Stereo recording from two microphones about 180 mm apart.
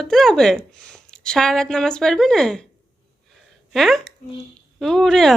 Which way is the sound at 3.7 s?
Centre (ahead or behind).